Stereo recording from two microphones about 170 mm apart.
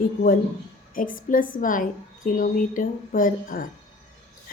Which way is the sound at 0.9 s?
55° left (ahead or behind).